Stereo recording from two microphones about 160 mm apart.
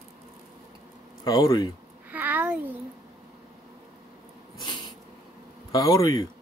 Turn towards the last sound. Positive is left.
turn(degrees=20)  # may be behind; listen again after turning